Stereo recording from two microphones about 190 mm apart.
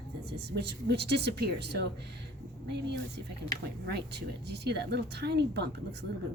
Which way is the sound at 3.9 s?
60° right (ahead or behind).